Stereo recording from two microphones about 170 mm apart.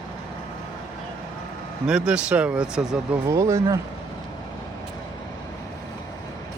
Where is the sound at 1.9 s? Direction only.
5° right (ahead or behind).